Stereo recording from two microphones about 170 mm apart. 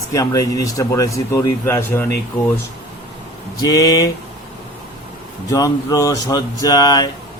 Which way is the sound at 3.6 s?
20° left (ahead or behind).